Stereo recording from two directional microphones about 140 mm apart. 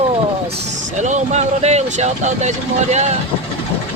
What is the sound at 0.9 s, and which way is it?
Speech, 60° right (ahead or behind).